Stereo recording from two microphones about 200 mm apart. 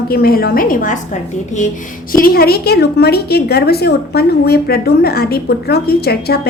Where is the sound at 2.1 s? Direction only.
50° left (ahead or behind).